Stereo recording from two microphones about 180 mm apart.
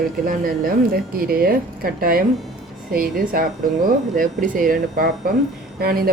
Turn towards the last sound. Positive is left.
turn(degrees=-55)  # may be behind; listen again after turning